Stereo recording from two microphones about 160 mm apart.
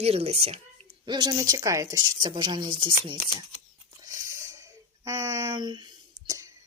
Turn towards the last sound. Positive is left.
turn(degrees=-20)  # may be behind; listen again after turning